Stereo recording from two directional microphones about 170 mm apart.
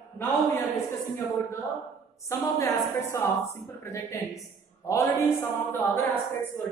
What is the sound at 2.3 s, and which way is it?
A woman's voice, 15° left (ahead or behind).